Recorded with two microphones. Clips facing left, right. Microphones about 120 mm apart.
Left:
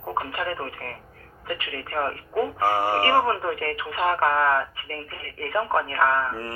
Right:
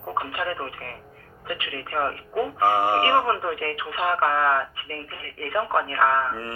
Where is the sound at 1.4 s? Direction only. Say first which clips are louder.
Even; 45° left (ahead or behind).